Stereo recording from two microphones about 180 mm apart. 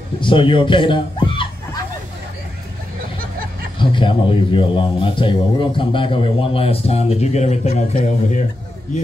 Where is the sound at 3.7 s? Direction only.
25° left (ahead or behind).